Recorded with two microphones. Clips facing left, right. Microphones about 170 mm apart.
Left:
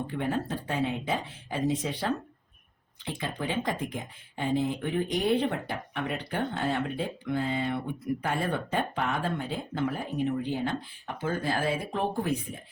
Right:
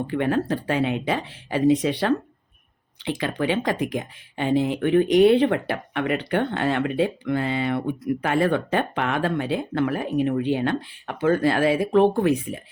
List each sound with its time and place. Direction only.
0.1 s speech: 80° right